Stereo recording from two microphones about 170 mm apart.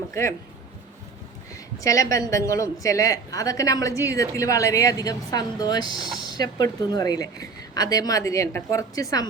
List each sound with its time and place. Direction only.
0.1 s speech: 15° left (ahead or behind)
1.8 s a woman's voice: 20° left (ahead or behind)